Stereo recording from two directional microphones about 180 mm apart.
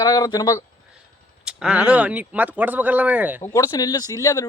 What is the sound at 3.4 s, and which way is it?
Speech, 20° left (ahead or behind).